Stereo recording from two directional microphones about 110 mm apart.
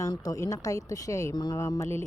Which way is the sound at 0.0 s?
35° left (ahead or behind).